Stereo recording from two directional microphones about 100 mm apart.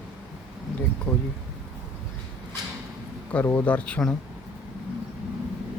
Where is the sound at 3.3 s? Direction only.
15° left (ahead or behind).